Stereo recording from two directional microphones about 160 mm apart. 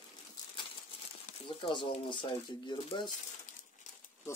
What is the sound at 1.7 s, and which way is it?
Speech, 30° left (ahead or behind).